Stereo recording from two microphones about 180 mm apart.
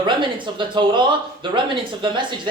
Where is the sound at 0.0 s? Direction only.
25° right (ahead or behind).